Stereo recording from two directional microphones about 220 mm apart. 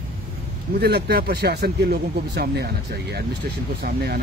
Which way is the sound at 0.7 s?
50° right (ahead or behind).